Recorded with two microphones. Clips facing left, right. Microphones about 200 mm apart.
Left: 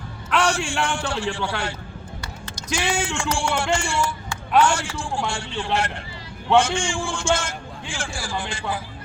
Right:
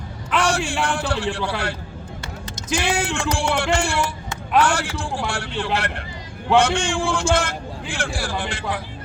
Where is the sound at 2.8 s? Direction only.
60° right (ahead or behind).